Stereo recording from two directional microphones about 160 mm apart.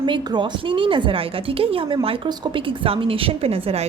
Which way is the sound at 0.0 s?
30° right (ahead or behind).